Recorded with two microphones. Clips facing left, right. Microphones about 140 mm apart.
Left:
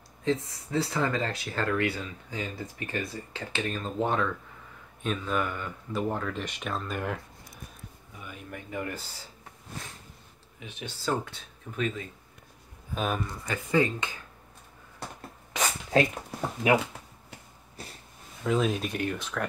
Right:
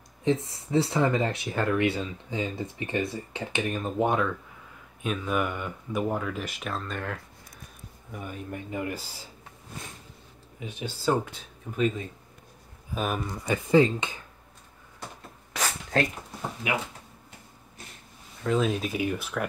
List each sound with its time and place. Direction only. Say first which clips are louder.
0.2 s speech: right 3 dB; 25° right (ahead or behind); by 7.1 s 5° left (ahead or behind)
8.5 s speech: right 2 dB; 20° right (ahead or behind)
10.6 s speech: right 5 dB; 15° right (ahead or behind)
12.9 s speech: right 1 dB; centre (ahead or behind)
13.5 s speech: right 5 dB; 20° right (ahead or behind)
15.5 s a sound: left 2 dB; 5° left (ahead or behind)
16.6 s speech: left 7 dB; 40° left (ahead or behind)
18.4 s speech: right 1 dB; centre (ahead or behind)